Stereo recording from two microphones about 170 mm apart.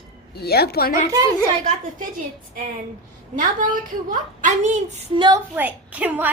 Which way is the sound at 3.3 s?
50° right (ahead or behind).